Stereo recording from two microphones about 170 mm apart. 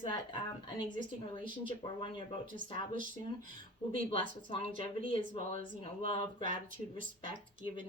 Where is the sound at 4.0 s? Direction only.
30° left (ahead or behind).